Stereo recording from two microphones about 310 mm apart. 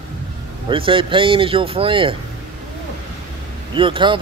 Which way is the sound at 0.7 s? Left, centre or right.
Centre.